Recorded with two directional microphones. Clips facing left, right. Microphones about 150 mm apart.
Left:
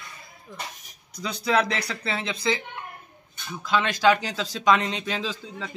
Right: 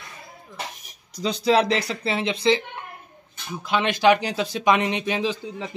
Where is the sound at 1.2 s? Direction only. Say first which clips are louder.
Right 4 dB; 25° right (ahead or behind).